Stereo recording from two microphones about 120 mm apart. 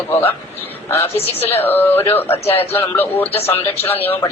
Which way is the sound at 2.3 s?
55° left (ahead or behind).